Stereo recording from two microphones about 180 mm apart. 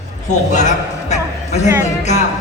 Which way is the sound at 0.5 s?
45° left (ahead or behind).